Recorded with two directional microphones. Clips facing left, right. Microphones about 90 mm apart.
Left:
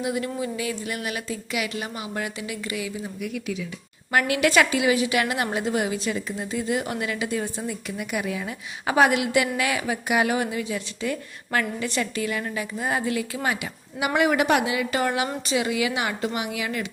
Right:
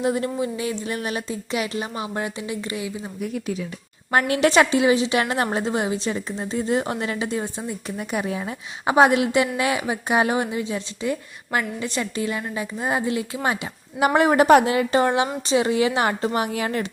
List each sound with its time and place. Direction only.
0.0 s a woman's voice: 35° right (ahead or behind)
15.0 s a woman's voice: 30° right (ahead or behind)